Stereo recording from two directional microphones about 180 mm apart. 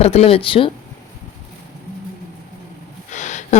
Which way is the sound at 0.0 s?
35° left (ahead or behind).